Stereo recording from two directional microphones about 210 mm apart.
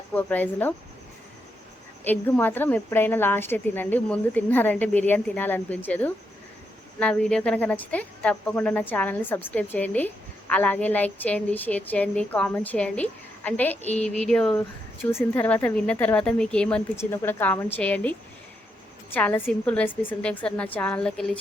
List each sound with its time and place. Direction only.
0.1 s a woman's voice: 10° left (ahead or behind)
2.0 s a woman's voice: 10° left (ahead or behind)
13.8 s speech: 30° left (ahead or behind)
14.3 s a woman's voice: 5° left (ahead or behind)